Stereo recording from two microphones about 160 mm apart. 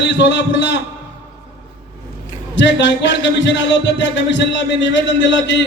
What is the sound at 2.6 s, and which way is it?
A man's voice, 90° left.